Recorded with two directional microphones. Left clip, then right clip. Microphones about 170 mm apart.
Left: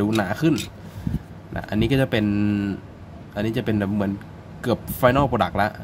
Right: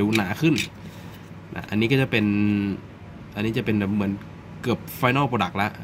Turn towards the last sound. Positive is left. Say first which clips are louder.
# left 3 dB
turn(degrees=5)  # may be behind; listen again after turning